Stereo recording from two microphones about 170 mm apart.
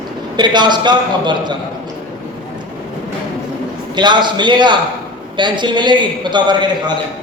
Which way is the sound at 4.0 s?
25° right (ahead or behind).